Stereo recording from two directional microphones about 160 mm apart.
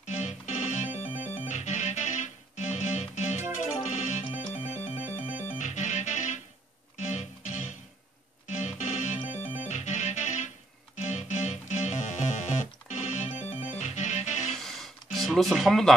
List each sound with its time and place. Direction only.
0.0 s organ: 45° left (ahead or behind)
1.4 s music: 45° left (ahead or behind)
14.5 s a sound: centre (ahead or behind)